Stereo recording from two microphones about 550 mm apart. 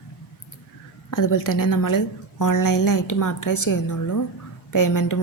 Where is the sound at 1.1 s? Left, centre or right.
Left.